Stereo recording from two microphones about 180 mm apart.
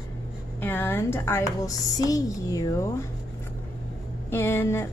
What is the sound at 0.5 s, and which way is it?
A woman's voice, 10° left (ahead or behind).